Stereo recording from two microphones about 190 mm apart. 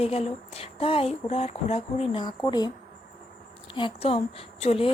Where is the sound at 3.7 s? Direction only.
30° left (ahead or behind).